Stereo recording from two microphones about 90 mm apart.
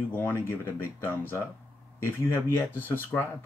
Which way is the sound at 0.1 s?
25° left (ahead or behind).